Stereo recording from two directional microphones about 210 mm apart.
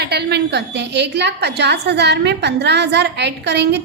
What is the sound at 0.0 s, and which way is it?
A woman's voice, 50° right (ahead or behind).